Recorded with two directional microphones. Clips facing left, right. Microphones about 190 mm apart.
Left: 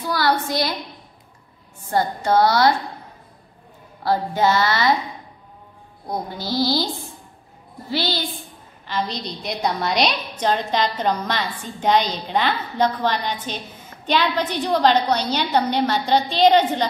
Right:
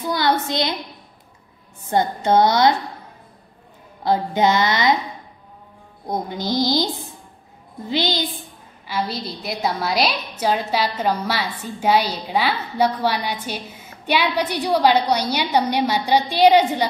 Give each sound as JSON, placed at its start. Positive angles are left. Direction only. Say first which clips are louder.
{"t": 0.1, "sound": "a woman's voice", "louder": "even", "side_deg": -20}
{"t": 1.9, "sound": "speech", "louder": "right 2 dB", "side_deg": -20}
{"t": 4.0, "sound": "speech", "louder": "right 1 dB", "side_deg": -20}
{"t": 6.0, "sound": "speech", "louder": "right 3 dB", "side_deg": -20}
{"t": 7.9, "sound": "a woman's voice", "louder": "right 2 dB", "side_deg": -20}